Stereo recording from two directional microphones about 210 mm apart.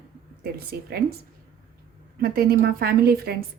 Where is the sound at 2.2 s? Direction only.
45° right (ahead or behind).